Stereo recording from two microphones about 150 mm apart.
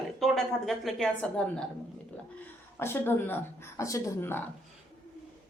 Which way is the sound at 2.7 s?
15° left (ahead or behind).